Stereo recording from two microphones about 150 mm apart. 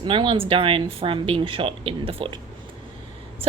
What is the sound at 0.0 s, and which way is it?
A woman's voice, 35° right (ahead or behind).